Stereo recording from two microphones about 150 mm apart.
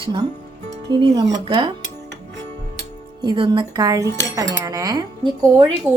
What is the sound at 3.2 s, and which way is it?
Cutlery, 30° right (ahead or behind).